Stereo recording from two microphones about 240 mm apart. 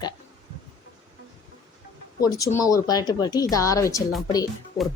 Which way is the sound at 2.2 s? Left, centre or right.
Centre.